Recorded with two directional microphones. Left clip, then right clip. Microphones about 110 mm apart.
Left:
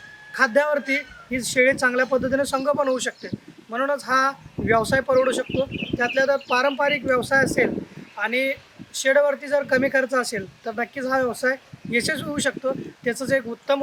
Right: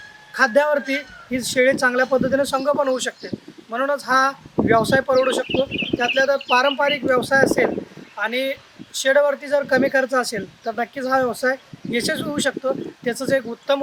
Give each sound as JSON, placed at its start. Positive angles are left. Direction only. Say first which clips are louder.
{"t": 0.3, "sound": "speech", "louder": "right 3 dB", "side_deg": 0}
{"t": 5.5, "sound": "speech", "louder": "right 4 dB", "side_deg": -40}
{"t": 6.1, "sound": "speech", "louder": "right 3 dB", "side_deg": 0}